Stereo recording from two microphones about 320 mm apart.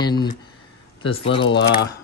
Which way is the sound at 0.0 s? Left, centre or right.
Centre.